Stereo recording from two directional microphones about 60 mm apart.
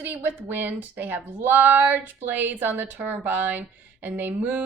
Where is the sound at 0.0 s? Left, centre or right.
Right.